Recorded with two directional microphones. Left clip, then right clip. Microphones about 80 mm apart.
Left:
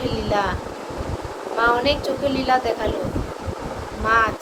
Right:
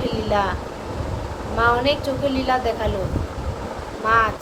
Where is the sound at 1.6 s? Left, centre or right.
Right.